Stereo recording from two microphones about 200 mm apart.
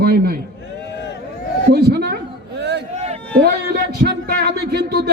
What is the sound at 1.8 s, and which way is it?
Speech, 55° right (ahead or behind).